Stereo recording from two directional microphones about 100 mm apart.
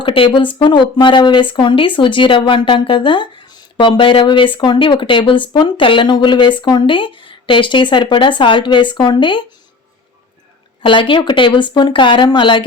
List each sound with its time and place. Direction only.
0.0 s speech: 60° left (ahead or behind)
10.8 s speech: 60° left (ahead or behind)